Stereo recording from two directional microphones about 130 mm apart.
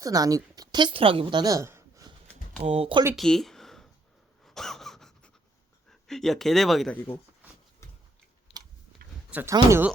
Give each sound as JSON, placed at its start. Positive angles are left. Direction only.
{"t": 0.0, "sound": "a woman's voice", "side_deg": -30}
{"t": 2.6, "sound": "speech", "side_deg": -50}
{"t": 3.2, "sound": "a sound", "side_deg": 0}
{"t": 4.4, "sound": "pant", "side_deg": 5}
{"t": 5.9, "sound": "speech", "side_deg": 5}
{"t": 9.3, "sound": "speech", "side_deg": -10}